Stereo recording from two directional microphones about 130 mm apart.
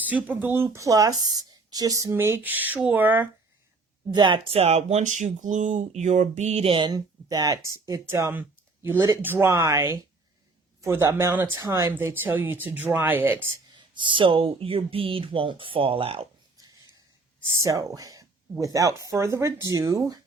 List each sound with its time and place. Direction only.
0.1 s speech: 10° right (ahead or behind)
4.1 s speech: 35° right (ahead or behind); by 13.5 s 15° right (ahead or behind)
13.7 s speech: 35° right (ahead or behind)
16.6 s a sound: 30° right (ahead or behind)
17.6 s speech: 25° right (ahead or behind)